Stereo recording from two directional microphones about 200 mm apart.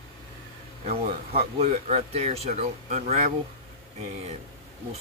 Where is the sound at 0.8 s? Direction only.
30° right (ahead or behind).